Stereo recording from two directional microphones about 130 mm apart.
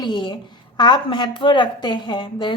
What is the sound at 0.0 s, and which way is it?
Speech, 35° left (ahead or behind).